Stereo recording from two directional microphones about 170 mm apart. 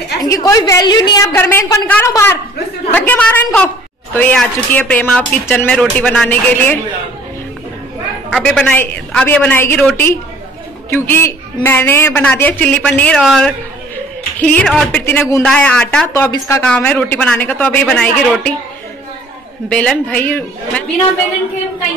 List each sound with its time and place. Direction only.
0.2 s a woman's voice: 20° left (ahead or behind)
8.3 s speech: centre (ahead or behind)
16.1 s speech: 15° left (ahead or behind)
19.7 s speech: 5° left (ahead or behind)